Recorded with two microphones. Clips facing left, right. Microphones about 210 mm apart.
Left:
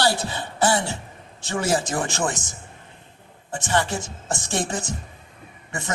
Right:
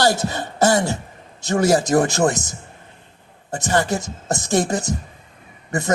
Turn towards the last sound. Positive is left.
turn(degrees=-40)  # may be behind; listen again after turning